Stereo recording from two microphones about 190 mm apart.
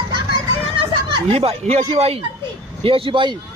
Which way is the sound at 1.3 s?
30° right (ahead or behind).